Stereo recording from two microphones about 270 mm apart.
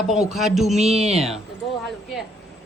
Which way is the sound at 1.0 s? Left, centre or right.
Right.